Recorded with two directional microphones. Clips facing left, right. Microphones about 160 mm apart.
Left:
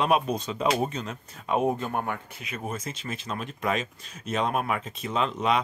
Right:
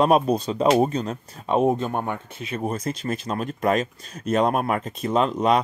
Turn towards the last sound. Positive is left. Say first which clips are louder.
# right 6 dB
turn(degrees=-40)  # may be behind; listen again after turning